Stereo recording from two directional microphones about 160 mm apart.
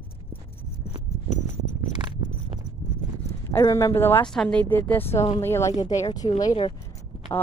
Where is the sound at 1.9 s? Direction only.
30° right (ahead or behind).